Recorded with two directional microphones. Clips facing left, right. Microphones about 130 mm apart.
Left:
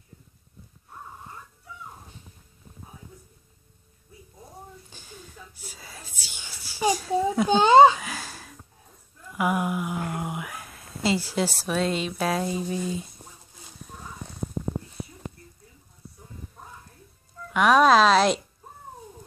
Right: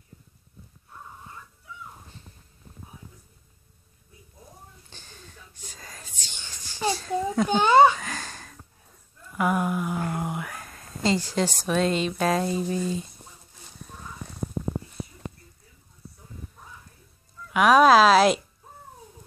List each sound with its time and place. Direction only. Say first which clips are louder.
4.8 s whispering: left 3 dB; 10° left (ahead or behind)
7.4 s a child's voice: left 2 dB; 25° left (ahead or behind)
8.0 s a sound: even; 10° left (ahead or behind)
9.4 s speech: right 1 dB; 10° left (ahead or behind)
17.5 s speech: right 1 dB; 5° right (ahead or behind)